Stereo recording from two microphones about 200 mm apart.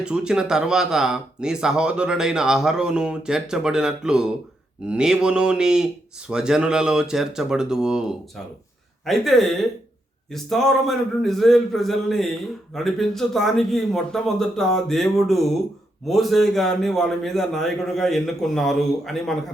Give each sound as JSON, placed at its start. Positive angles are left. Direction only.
{"t": 0.0, "sound": "a man's voice", "side_deg": -5}